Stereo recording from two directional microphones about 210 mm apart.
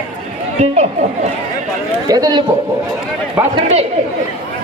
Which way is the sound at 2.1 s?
20° right (ahead or behind).